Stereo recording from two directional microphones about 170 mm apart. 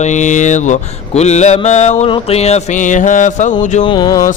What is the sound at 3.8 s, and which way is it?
Music, 30° left (ahead or behind).